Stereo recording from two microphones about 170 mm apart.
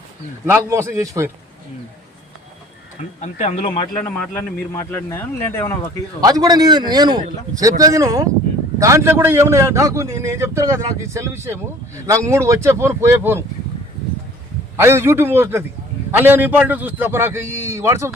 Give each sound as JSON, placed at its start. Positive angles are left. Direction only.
{"t": 0.4, "sound": "a man's voice", "side_deg": -15}
{"t": 3.2, "sound": "speech", "side_deg": 40}
{"t": 4.1, "sound": "speech", "side_deg": 10}
{"t": 6.1, "sound": "a man's voice", "side_deg": -20}
{"t": 14.8, "sound": "a man's voice", "side_deg": -15}